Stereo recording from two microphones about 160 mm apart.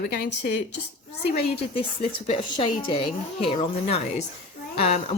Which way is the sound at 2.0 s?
35° left (ahead or behind).